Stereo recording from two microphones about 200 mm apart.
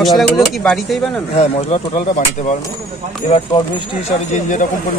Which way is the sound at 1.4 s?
30° left (ahead or behind).